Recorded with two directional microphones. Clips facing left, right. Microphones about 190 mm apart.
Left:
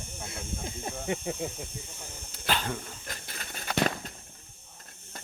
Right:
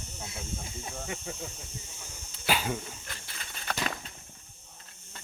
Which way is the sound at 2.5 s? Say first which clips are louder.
Right 1 dB; 10° right (ahead or behind).